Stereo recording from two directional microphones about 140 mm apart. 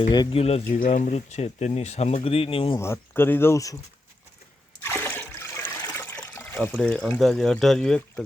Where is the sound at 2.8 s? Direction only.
15° left (ahead or behind).